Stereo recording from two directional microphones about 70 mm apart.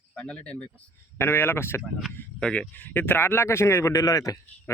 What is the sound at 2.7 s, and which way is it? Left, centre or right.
A man's voice, left.